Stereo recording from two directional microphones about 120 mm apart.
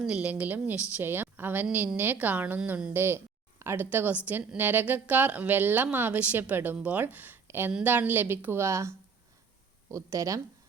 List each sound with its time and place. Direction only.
0.0 s a woman's voice: 10° right (ahead or behind)
9.9 s speech: 25° right (ahead or behind)